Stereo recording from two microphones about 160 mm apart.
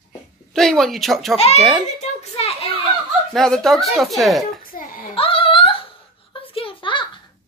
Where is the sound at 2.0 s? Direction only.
40° left (ahead or behind).